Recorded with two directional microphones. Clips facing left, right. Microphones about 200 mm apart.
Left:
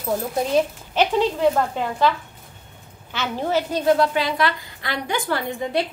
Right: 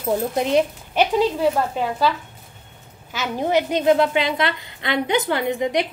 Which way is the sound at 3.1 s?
15° right (ahead or behind).